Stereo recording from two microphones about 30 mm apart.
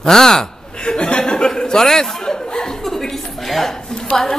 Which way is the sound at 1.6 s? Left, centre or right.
Left.